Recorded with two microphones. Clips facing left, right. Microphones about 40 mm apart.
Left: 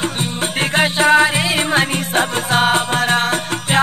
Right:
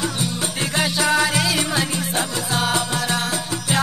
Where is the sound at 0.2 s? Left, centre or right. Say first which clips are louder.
Left 4 dB; left.